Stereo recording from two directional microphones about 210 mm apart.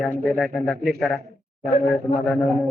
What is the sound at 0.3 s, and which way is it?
Speech, 5° left (ahead or behind).